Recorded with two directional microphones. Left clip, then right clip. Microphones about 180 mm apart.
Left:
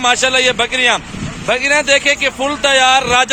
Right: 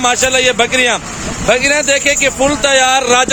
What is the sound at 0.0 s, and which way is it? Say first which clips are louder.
A man's voice: right 1 dB; 10° right (ahead or behind).